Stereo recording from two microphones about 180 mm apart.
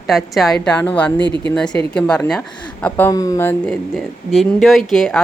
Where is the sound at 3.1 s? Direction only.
20° left (ahead or behind).